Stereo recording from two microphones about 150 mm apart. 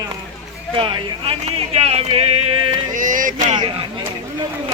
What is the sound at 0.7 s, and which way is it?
Speech, 35° right (ahead or behind).